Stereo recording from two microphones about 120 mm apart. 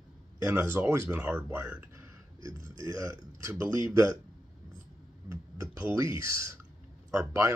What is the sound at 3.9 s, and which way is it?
Speech, 25° right (ahead or behind).